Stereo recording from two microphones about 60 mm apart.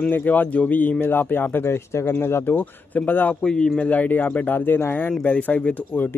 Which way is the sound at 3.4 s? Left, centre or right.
Centre.